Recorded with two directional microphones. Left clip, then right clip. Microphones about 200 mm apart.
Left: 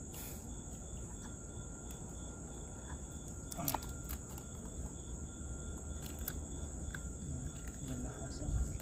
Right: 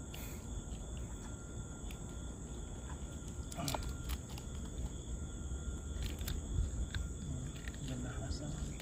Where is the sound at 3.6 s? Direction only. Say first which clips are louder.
Even; 10° left (ahead or behind).